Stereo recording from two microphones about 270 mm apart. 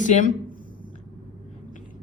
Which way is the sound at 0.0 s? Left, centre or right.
Left.